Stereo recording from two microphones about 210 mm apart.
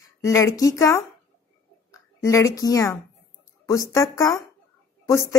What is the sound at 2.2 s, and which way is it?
Speech, 15° left (ahead or behind).